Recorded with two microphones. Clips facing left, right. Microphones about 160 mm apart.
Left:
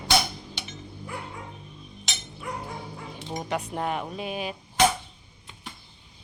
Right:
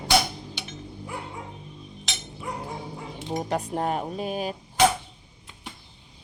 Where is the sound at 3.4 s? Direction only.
45° right (ahead or behind).